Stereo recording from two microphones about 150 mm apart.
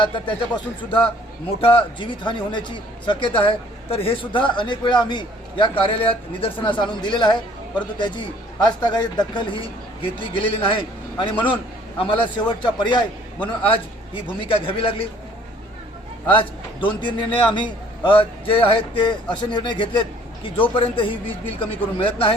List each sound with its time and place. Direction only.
0.0 s a man's voice: 30° left (ahead or behind)
16.3 s a man's voice: 35° left (ahead or behind)